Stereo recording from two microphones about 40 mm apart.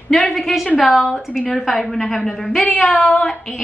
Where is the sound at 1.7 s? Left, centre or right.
Centre.